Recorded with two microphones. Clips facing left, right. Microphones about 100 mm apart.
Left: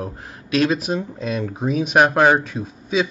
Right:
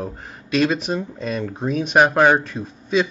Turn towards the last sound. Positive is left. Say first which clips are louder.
# right 1 dB
turn(degrees=5)  # may be behind; listen again after turning